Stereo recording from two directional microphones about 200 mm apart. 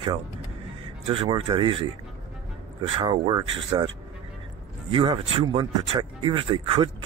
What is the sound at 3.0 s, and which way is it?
Speech, 20° right (ahead or behind).